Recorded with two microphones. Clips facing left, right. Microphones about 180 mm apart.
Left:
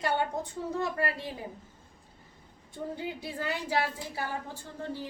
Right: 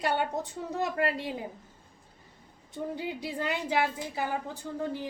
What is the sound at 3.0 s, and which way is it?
A woman's voice, 20° right (ahead or behind).